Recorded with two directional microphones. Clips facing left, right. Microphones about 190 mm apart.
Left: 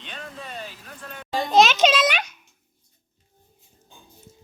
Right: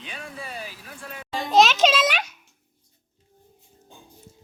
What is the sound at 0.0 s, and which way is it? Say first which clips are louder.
Children playing: right 1 dB; 10° right (ahead or behind).